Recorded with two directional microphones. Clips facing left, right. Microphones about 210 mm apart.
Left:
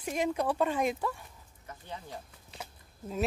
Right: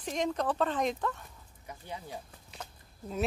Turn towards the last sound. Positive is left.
turn(degrees=0)  # may be behind; listen again after turning